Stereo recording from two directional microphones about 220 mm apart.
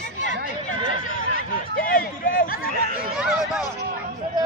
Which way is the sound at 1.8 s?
40° left (ahead or behind).